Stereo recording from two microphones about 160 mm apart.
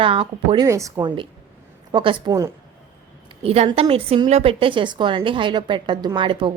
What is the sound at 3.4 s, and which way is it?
A woman's voice, 40° right (ahead or behind).